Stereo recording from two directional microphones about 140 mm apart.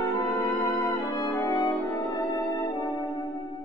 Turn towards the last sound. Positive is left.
turn(degrees=25)  # may be behind; listen again after turning